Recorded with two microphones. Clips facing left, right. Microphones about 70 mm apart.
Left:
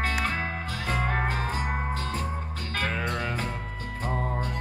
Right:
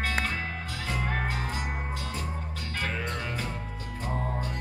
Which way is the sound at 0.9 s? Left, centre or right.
Left.